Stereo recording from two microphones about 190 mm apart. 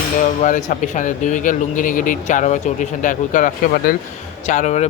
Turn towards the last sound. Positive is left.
turn(degrees=40)  # may be behind; listen again after turning